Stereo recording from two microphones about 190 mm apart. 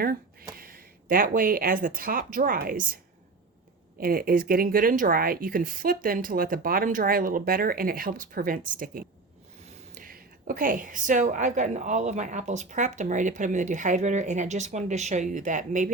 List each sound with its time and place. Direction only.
0.6 s speech: 50° right (ahead or behind)
4.0 s a woman's voice: 50° right (ahead or behind)